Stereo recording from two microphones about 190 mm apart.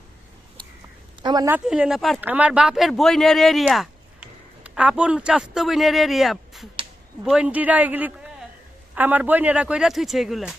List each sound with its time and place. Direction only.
1.2 s a woman's voice: 20° right (ahead or behind)
1.5 s speech: 5° right (ahead or behind)